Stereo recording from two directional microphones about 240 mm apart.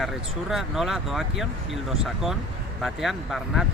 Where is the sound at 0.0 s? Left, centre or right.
Centre.